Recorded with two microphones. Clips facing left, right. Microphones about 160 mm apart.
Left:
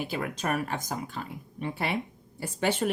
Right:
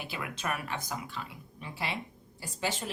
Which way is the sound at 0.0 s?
45° left (ahead or behind).